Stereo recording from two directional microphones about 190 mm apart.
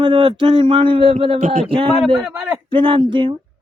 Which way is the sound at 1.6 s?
30° right (ahead or behind).